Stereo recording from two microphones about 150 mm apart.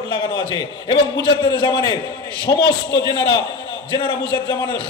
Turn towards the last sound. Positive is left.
turn(degrees=30)  # may be behind; listen again after turning